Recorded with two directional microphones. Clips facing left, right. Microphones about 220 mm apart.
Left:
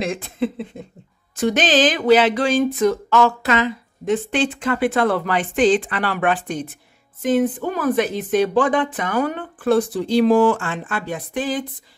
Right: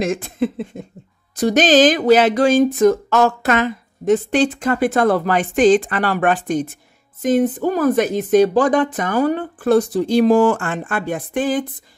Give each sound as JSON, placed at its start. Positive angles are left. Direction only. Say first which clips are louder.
{"t": 0.0, "sound": "speech", "louder": "right 3 dB", "side_deg": -45}